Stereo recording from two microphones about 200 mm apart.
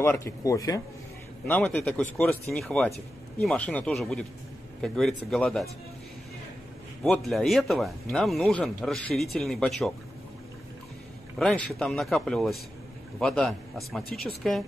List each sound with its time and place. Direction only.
0.0 s speech: 10° left (ahead or behind)
1.5 s speech: 5° left (ahead or behind)
7.0 s speech: centre (ahead or behind)
11.3 s speech: 5° left (ahead or behind)